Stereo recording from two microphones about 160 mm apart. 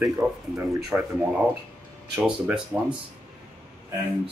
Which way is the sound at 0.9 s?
5° right (ahead or behind).